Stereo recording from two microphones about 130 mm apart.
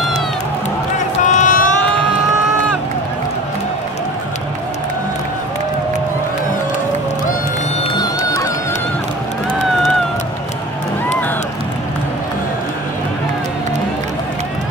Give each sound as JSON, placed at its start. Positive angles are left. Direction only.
{"t": 0.9, "sound": "run", "side_deg": 70}
{"t": 7.9, "sound": "music", "side_deg": 30}